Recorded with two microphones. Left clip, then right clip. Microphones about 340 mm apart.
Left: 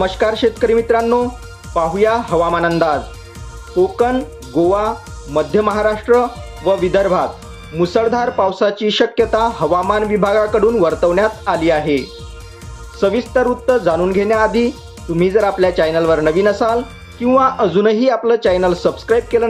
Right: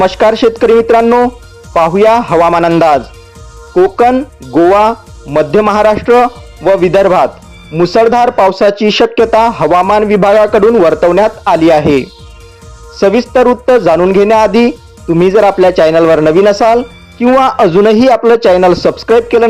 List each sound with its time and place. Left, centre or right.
0.0 s speech: right
5.3 s speech: right